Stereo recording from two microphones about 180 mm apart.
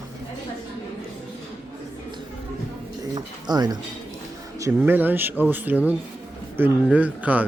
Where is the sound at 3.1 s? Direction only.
20° right (ahead or behind).